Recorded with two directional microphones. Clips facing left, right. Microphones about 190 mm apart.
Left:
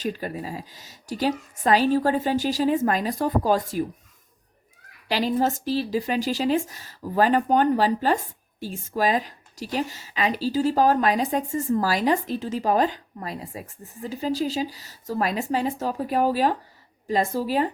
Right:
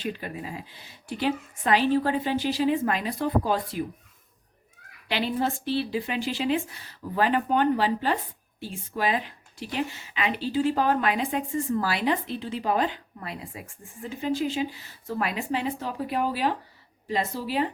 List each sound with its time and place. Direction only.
0.0 s speech: 40° left (ahead or behind)
5.0 s a woman's voice: 40° left (ahead or behind)